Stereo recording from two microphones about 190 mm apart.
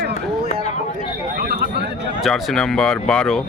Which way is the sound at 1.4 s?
55° right (ahead or behind).